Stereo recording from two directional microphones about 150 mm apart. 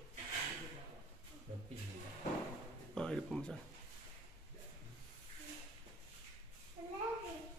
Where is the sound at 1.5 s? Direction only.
60° right (ahead or behind).